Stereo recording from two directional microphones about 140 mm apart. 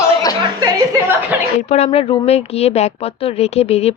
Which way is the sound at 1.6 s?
55° left (ahead or behind).